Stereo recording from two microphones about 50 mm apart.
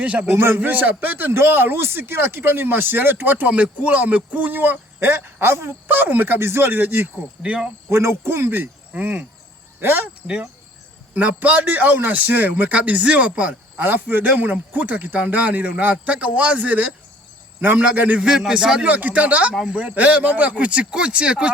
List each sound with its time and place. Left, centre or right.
0.0 s a man's voice: right
0.3 s speech: right
0.6 s speech: right
5.9 s speech: right
6.4 s speech: right
7.4 s speech: centre
7.9 s speech: right
8.9 s a man's voice: right
11.1 s a man's voice: right
13.7 s a man's voice: right
17.9 s speech: right
18.3 s a man's voice: centre
18.9 s a man's voice: right